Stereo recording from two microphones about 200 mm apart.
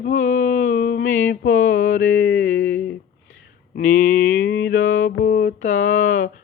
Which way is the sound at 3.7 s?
45° left (ahead or behind).